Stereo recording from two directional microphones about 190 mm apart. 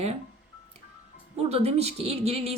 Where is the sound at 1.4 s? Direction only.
35° right (ahead or behind).